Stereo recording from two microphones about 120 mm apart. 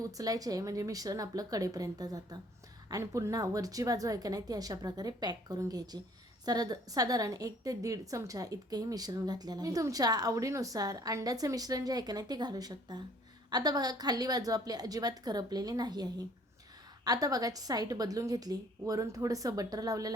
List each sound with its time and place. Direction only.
0.1 s a woman's voice: 30° right (ahead or behind)